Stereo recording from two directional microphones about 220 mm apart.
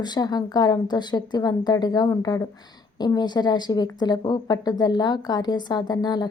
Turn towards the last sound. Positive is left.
turn(degrees=20)  # may be behind; listen again after turning